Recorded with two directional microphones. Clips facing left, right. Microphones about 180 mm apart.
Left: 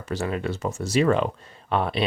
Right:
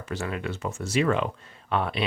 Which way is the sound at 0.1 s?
35° left (ahead or behind).